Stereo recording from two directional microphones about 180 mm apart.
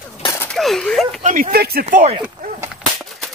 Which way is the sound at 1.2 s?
50° right (ahead or behind).